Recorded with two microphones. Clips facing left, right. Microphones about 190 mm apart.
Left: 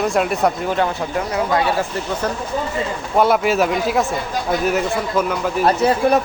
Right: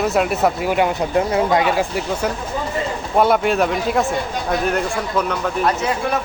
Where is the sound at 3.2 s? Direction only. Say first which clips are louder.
Even; centre (ahead or behind).